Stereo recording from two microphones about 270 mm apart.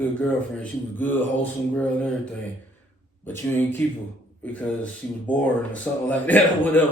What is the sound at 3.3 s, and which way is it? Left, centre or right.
Speech, centre.